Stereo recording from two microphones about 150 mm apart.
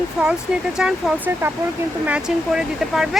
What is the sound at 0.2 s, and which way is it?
Speech, 5° right (ahead or behind).